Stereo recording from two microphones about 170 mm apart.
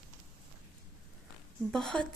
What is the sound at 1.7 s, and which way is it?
Speech, 5° left (ahead or behind).